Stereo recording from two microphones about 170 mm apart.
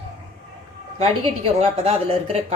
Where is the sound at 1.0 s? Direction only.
35° right (ahead or behind).